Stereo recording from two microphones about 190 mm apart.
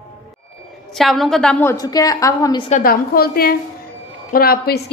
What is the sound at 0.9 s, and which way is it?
A woman's voice, centre (ahead or behind).